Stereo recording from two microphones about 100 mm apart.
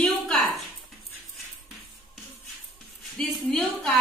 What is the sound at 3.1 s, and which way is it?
Speech, centre (ahead or behind).